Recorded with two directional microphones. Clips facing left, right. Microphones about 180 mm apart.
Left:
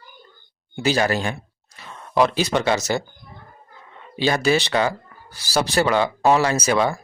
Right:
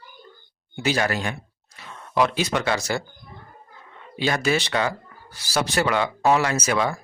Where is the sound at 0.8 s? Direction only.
30° left (ahead or behind).